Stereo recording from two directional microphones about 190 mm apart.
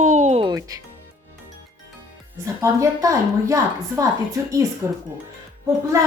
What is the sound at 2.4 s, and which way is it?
A woman's voice, 15° right (ahead or behind).